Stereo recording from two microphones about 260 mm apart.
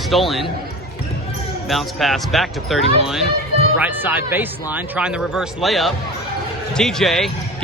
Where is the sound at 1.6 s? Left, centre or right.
Centre.